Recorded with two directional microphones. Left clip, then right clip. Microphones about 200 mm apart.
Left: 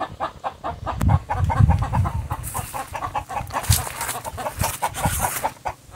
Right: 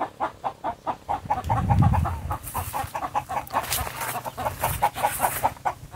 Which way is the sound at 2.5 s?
15° left (ahead or behind).